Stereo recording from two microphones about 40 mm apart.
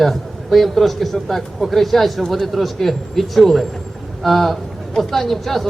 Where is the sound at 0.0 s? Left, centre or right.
Centre.